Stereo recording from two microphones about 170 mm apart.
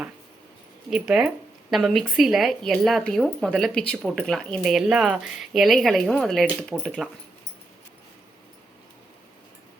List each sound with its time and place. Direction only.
0.9 s a woman's voice: 5° right (ahead or behind)